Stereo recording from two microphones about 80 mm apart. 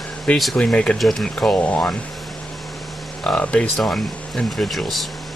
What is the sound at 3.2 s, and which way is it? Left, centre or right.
Speech, centre.